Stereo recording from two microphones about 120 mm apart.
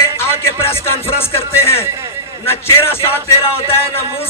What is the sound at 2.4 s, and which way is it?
Speech, 20° left (ahead or behind).